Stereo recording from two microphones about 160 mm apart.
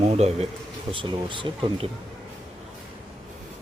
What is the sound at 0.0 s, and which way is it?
Speech, 45° right (ahead or behind).